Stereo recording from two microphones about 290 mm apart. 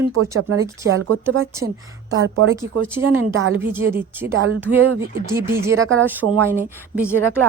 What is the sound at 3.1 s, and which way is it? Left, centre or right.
Speech, right.